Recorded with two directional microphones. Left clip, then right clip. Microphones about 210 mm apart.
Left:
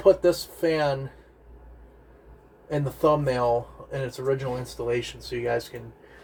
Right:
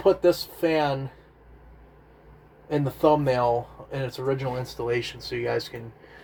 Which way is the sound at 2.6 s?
30° right (ahead or behind).